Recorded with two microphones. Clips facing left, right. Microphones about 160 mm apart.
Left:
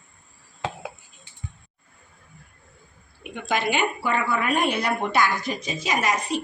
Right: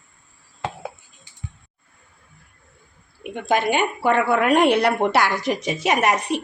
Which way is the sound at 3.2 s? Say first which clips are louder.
Right 5 dB; 50° right (ahead or behind).